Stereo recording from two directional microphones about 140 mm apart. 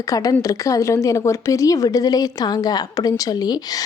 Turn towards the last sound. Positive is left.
turn(degrees=30)  # may be behind; listen again after turning